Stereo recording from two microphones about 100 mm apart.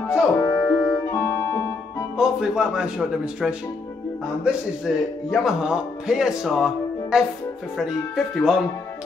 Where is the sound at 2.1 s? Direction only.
5° right (ahead or behind).